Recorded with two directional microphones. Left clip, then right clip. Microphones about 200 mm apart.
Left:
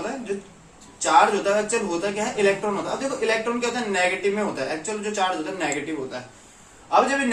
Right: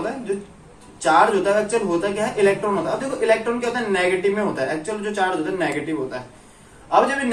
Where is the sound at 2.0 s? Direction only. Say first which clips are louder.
Right 3 dB; 15° left (ahead or behind).